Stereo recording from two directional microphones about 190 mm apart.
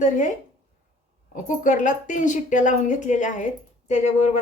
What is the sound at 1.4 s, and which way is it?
A woman's voice, 40° left (ahead or behind).